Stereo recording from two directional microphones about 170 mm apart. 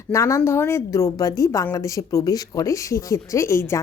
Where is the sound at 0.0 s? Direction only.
15° left (ahead or behind).